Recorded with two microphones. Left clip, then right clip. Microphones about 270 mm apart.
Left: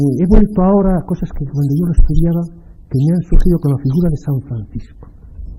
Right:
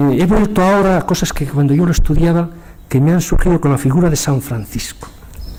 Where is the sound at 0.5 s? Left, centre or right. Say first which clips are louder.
Right 3 dB; centre.